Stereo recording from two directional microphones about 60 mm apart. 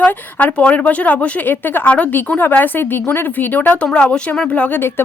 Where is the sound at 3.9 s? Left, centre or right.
Centre.